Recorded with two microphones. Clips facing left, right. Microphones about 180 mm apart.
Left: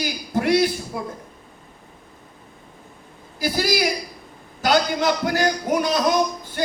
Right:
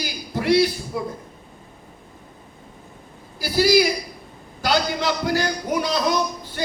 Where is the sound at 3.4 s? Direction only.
50° left (ahead or behind).